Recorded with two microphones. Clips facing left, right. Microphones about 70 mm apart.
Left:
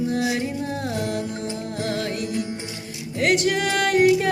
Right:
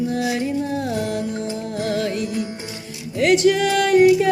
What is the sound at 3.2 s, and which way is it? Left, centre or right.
Music, left.